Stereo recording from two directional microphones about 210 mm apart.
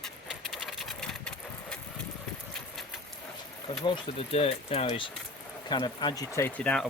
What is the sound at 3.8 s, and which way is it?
Speech, 25° left (ahead or behind).